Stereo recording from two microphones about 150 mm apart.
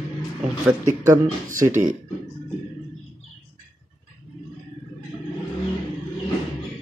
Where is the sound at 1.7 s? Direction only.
60° right (ahead or behind).